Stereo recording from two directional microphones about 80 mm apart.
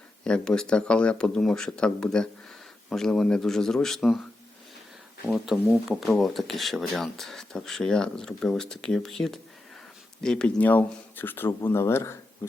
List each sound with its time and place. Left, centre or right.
0.3 s speech: centre
5.2 s speech: centre; by 12.6 s left